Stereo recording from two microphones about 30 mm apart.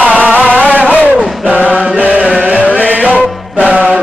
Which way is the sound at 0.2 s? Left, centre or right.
Right.